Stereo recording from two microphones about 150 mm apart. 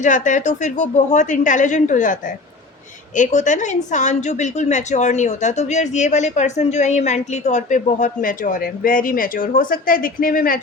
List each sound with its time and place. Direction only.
0.0 s a woman's voice: 55° left (ahead or behind)
3.2 s a woman's voice: 55° left (ahead or behind); by 10.6 s 70° left (ahead or behind)